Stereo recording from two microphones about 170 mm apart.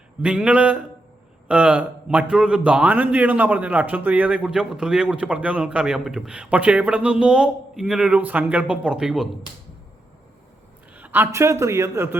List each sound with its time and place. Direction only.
0.2 s a man's voice: 5° right (ahead or behind)
10.9 s a man's voice: 10° right (ahead or behind)